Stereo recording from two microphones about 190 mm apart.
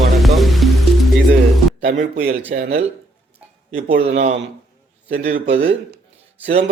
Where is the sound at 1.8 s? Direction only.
45° right (ahead or behind).